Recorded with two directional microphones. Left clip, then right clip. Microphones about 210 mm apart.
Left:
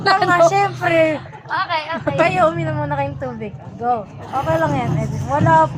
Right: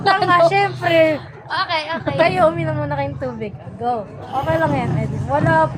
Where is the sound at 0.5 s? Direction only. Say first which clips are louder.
Even; 5° right (ahead or behind).